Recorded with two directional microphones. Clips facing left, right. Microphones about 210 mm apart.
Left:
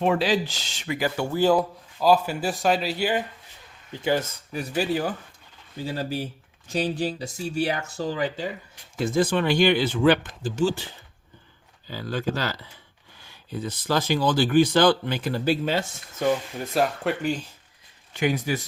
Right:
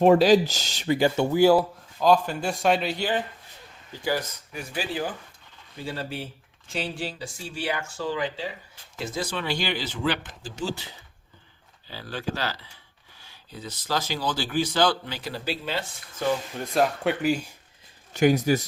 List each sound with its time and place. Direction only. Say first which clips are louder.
0.0 s speech: right 6 dB; 40° right (ahead or behind); by 1.4 s 20° right (ahead or behind)
1.4 s speech: right 2 dB; 10° right (ahead or behind)
2.0 s speech: even; 5° left (ahead or behind)
3.9 s speech: left 3 dB; 25° left (ahead or behind)
5.8 s speech: left 4 dB; 40° left (ahead or behind); by 10.2 s 55° left (ahead or behind)
11.9 s a man's voice: left 4 dB; 45° left (ahead or behind)
16.6 s speech: even; centre (ahead or behind)
18.1 s speech: right 5 dB; 40° right (ahead or behind)